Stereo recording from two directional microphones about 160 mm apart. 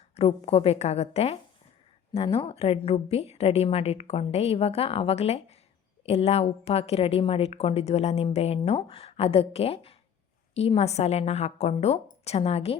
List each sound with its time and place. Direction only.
0.2 s a woman's voice: 35° left (ahead or behind)